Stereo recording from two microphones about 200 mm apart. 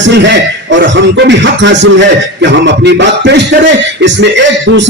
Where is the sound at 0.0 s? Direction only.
60° right (ahead or behind).